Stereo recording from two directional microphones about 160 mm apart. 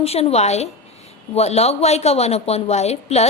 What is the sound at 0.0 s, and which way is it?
A woman's voice, 40° left (ahead or behind).